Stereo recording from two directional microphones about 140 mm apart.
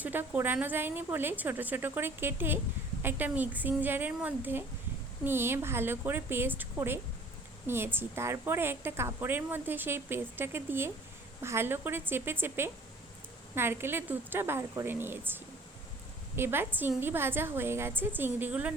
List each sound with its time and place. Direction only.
0.0 s a woman's voice: 15° right (ahead or behind)